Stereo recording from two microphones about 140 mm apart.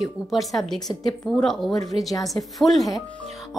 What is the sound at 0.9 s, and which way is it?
Speech, 30° left (ahead or behind).